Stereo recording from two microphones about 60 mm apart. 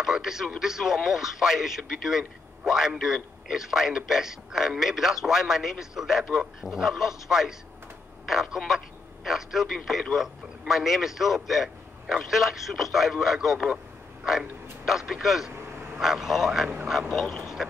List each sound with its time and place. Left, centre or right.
0.0 s a man's voice: centre
16.6 s a man's voice: centre
17.1 s speech: centre
17.6 s a sound: centre